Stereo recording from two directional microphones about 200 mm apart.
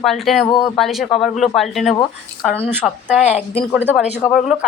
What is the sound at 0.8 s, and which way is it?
Speech, centre (ahead or behind).